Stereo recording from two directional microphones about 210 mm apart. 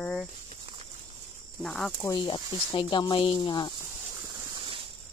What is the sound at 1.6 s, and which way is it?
Speech, centre (ahead or behind).